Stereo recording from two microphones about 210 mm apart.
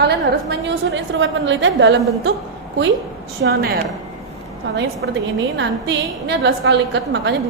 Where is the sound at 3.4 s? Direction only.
55° right (ahead or behind).